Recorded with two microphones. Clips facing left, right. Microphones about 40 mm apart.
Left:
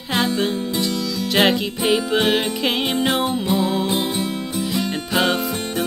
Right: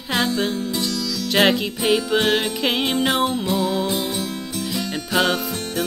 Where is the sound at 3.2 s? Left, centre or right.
Centre.